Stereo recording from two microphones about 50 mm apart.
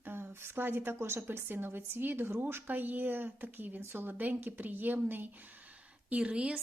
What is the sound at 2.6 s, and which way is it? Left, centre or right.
Speech, right.